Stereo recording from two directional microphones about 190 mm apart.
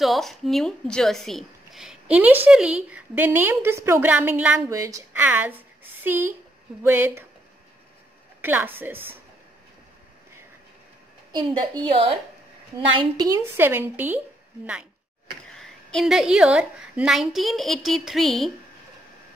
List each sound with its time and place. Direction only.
0.0 s a woman's voice: centre (ahead or behind)
8.4 s a woman's voice: 10° right (ahead or behind)
11.8 s a woman's voice: 30° right (ahead or behind)
13.2 s a woman's voice: 15° right (ahead or behind)
15.5 s a woman's voice: centre (ahead or behind)